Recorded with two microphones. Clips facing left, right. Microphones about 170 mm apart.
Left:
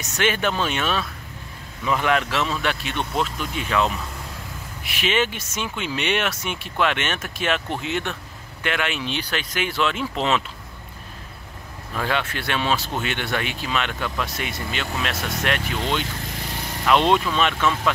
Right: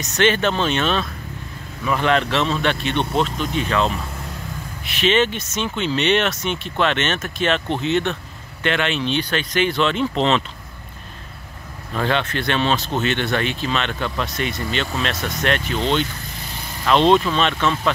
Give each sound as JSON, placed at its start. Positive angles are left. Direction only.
{"t": 0.0, "sound": "speech", "side_deg": 10}
{"t": 3.0, "sound": "speech", "side_deg": -25}
{"t": 3.5, "sound": "speech", "side_deg": 10}
{"t": 4.8, "sound": "speech", "side_deg": 10}
{"t": 12.0, "sound": "speech", "side_deg": 10}
{"t": 16.9, "sound": "speech", "side_deg": 10}